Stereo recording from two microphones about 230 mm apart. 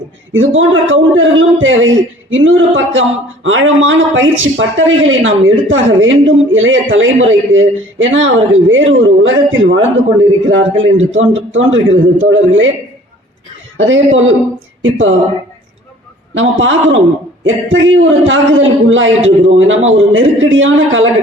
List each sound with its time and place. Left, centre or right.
0.3 s speech: right
13.7 s speech: right
16.3 s speech: right